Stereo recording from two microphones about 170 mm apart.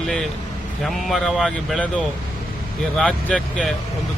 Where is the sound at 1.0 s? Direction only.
Centre (ahead or behind).